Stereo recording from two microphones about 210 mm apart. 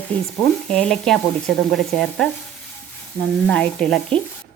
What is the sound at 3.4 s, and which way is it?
Speech, 5° left (ahead or behind).